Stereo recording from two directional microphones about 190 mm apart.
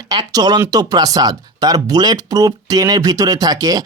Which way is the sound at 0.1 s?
20° right (ahead or behind).